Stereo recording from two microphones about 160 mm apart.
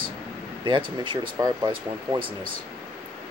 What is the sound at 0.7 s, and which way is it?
Speech, 30° right (ahead or behind).